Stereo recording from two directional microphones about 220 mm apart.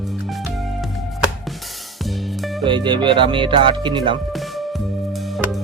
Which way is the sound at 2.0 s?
Centre (ahead or behind).